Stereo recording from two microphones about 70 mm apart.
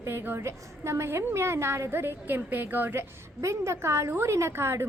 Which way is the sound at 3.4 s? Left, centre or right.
Right.